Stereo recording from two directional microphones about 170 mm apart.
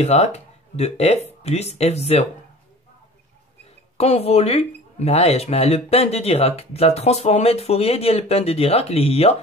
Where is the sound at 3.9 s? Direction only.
35° left (ahead or behind).